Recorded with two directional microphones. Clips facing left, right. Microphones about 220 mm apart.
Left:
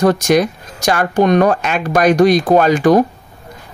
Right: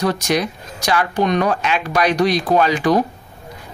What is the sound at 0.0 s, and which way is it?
Speech, 50° left (ahead or behind).